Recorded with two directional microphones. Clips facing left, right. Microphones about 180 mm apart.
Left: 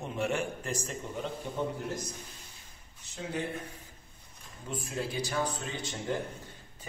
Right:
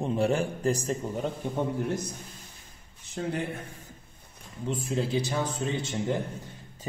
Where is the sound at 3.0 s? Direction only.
55° right (ahead or behind).